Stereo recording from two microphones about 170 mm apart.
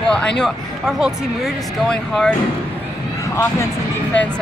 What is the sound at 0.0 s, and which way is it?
Speech, 5° left (ahead or behind).